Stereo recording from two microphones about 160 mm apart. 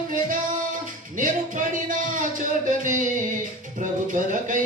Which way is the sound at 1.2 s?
55° right (ahead or behind).